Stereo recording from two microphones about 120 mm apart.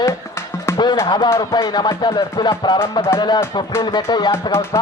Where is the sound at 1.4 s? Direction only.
35° left (ahead or behind).